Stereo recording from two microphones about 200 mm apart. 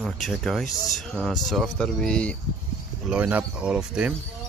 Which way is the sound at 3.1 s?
5° right (ahead or behind).